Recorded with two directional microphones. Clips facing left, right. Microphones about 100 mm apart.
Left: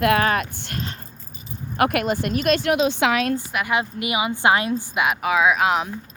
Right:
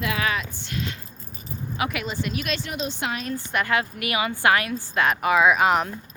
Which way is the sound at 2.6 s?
75° left (ahead or behind).